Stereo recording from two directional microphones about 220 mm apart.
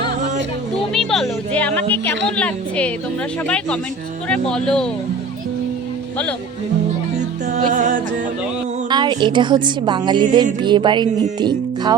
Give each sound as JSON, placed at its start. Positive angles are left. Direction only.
{"t": 0.9, "sound": "a woman's voice", "side_deg": 0}
{"t": 7.7, "sound": "music", "side_deg": -35}
{"t": 8.9, "sound": "speech", "side_deg": -20}